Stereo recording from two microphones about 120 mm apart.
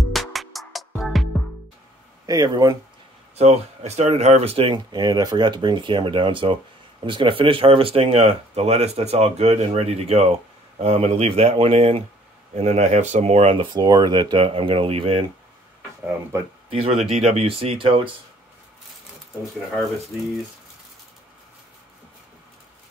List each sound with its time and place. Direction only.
0.1 s music: centre (ahead or behind)
2.2 s speech: 30° right (ahead or behind)
3.3 s speech: 65° right (ahead or behind)
12.5 s speech: 65° right (ahead or behind)
13.7 s speech: 35° right (ahead or behind); by 15.2 s 55° right (ahead or behind)
16.8 s speech: 60° right (ahead or behind)